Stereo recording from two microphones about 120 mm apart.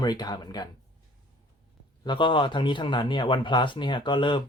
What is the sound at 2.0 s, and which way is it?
Speech, 45° left (ahead or behind).